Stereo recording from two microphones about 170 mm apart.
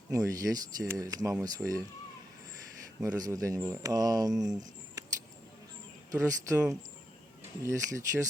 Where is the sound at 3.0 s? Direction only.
20° right (ahead or behind).